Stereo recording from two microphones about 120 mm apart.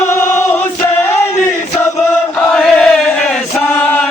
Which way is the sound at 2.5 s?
5° left (ahead or behind).